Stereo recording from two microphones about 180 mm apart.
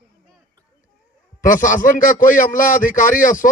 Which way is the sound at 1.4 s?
45° left (ahead or behind).